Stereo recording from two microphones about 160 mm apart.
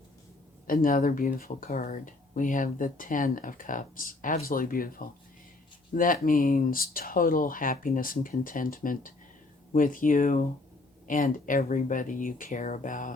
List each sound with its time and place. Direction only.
0.7 s speech: 60° left (ahead or behind)